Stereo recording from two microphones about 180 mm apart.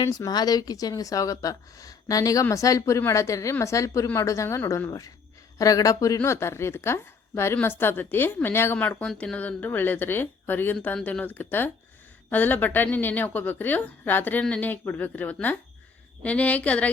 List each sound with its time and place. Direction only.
0.2 s a woman's voice: 20° left (ahead or behind)